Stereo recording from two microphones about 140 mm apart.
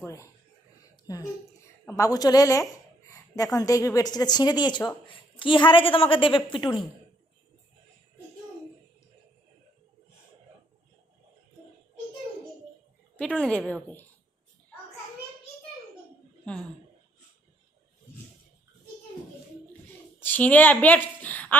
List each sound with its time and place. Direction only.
0.0 s a sound: 20° left (ahead or behind)
1.9 s a woman's voice: 25° left (ahead or behind)
13.1 s a woman's voice: 5° left (ahead or behind)
16.5 s a woman's voice: 5° left (ahead or behind)
20.1 s a woman's voice: 15° left (ahead or behind)